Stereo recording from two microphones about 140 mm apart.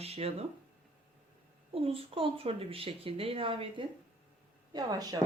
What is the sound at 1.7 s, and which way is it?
Speech, 40° right (ahead or behind).